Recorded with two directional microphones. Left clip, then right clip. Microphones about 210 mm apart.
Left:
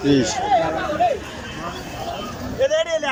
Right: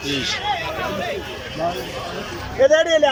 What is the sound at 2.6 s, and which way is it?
Speech, 35° right (ahead or behind).